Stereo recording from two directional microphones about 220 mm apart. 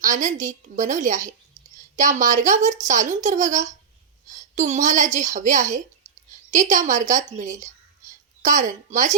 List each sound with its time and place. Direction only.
0.0 s speech: 35° right (ahead or behind)